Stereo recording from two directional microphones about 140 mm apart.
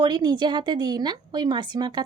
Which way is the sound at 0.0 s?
30° right (ahead or behind).